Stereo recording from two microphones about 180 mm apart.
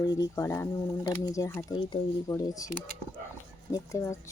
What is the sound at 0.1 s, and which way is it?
Speech, 20° left (ahead or behind).